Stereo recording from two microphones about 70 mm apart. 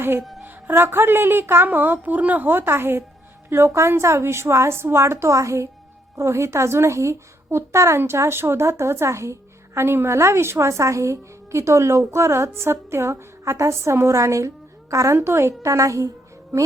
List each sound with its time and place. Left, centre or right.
0.2 s speech: centre
0.4 s a woman's voice: right